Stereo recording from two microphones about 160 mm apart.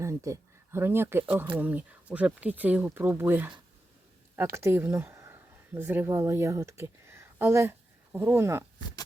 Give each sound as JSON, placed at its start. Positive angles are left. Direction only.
{"t": 0.0, "sound": "speech", "side_deg": -20}
{"t": 4.5, "sound": "speech", "side_deg": -15}